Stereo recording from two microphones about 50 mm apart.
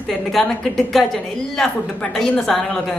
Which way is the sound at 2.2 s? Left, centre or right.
Centre.